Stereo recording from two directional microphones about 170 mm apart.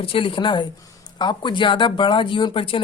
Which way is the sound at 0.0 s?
30° left (ahead or behind).